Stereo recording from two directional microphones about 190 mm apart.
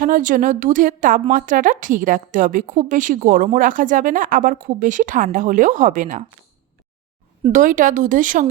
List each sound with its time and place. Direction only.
0.0 s a woman's voice: 45° right (ahead or behind)
7.5 s a woman's voice: 45° right (ahead or behind)